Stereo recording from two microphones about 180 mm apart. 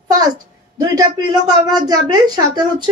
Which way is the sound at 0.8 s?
20° right (ahead or behind).